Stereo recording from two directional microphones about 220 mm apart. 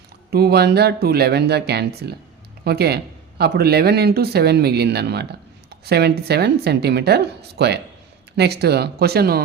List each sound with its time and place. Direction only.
0.3 s speech: 45° right (ahead or behind)